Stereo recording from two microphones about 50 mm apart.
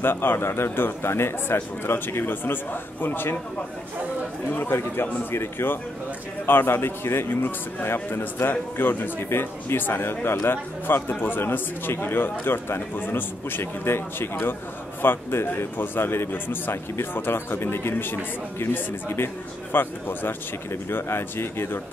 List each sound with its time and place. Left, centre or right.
0.0 s a man's voice: left
4.6 s a man's voice: left